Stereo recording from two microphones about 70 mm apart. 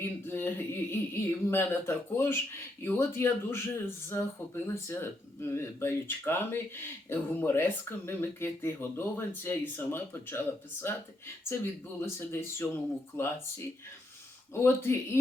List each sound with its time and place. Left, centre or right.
0.0 s speech: left
11.9 s speech: left